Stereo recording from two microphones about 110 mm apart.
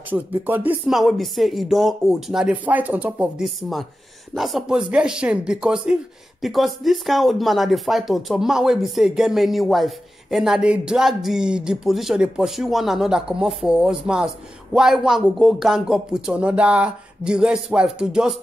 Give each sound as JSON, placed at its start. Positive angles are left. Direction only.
{"t": 0.1, "sound": "speech", "side_deg": -15}
{"t": 0.8, "sound": "speech", "side_deg": -5}
{"t": 3.4, "sound": "speech", "side_deg": 0}